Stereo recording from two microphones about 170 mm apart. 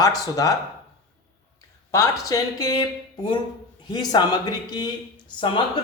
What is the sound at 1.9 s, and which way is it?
A man's voice, 20° left (ahead or behind).